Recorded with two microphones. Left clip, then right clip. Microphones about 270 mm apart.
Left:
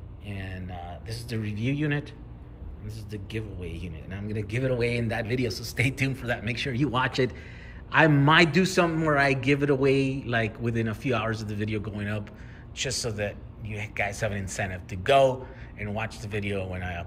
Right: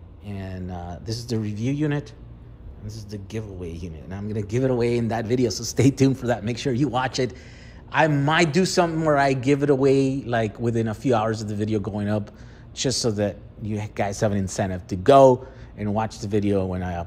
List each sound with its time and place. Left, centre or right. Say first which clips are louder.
0.3 s a sound: right 3 dB; centre
0.8 s a man's voice: right 6 dB; centre
3.1 s a man's voice: right 2 dB; centre